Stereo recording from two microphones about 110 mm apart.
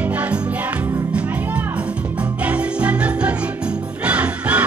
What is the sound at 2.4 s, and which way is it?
Music, 10° right (ahead or behind).